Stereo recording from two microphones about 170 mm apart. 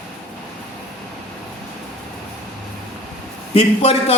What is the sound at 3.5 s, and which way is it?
Speech, 35° left (ahead or behind).